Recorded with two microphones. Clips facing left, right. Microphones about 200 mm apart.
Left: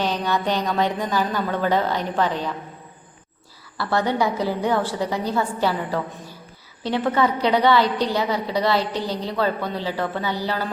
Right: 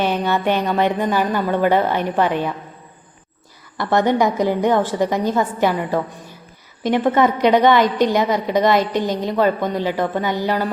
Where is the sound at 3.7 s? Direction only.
15° right (ahead or behind).